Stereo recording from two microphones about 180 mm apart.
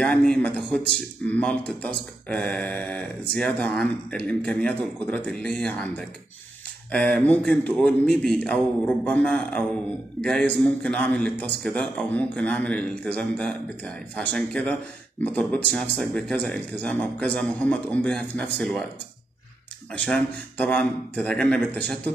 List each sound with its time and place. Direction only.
0.0 s a man's voice: 5° left (ahead or behind)
19.9 s speech: 5° left (ahead or behind)